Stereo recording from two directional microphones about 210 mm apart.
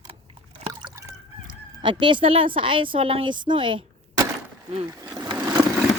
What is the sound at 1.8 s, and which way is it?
A woman's voice, 25° right (ahead or behind).